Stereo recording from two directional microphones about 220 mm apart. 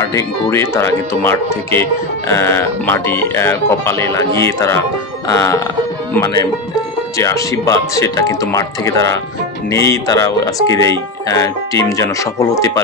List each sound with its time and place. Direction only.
0.1 s speech: 10° left (ahead or behind)